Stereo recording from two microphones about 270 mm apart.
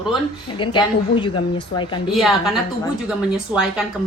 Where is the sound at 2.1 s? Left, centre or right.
Centre.